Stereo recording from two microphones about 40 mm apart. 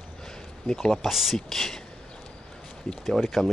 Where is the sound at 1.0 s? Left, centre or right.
Centre.